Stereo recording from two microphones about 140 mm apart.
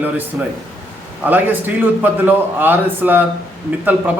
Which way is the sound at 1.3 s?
10° right (ahead or behind).